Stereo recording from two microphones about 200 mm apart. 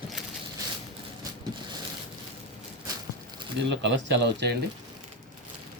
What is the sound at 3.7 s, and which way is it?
Speech, 60° right (ahead or behind).